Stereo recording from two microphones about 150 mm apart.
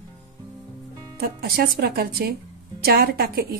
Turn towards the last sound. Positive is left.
turn(degrees=-90)